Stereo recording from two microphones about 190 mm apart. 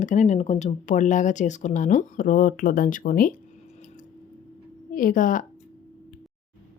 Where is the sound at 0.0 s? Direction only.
40° left (ahead or behind).